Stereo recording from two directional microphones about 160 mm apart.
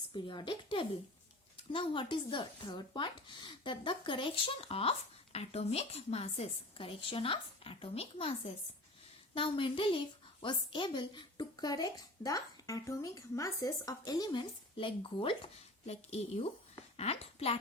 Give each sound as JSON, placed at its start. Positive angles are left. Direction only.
{"t": 0.1, "sound": "speech", "side_deg": 30}